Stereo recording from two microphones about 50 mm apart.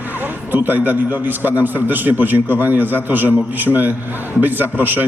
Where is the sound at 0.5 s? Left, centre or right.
Right.